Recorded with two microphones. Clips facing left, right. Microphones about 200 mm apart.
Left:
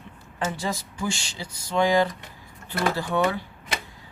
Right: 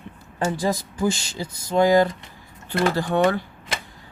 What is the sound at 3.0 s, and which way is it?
Speech, 55° right (ahead or behind).